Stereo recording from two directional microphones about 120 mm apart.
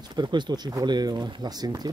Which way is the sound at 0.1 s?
40° right (ahead or behind).